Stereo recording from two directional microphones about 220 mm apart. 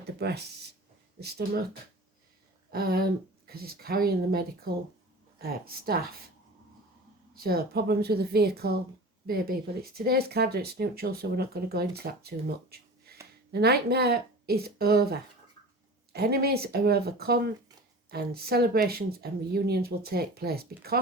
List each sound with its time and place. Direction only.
0.0 s speech: 45° right (ahead or behind)
2.7 s speech: 40° right (ahead or behind)
7.3 s speech: 45° right (ahead or behind)